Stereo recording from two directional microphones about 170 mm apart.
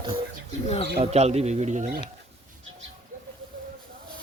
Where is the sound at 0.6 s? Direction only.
35° left (ahead or behind).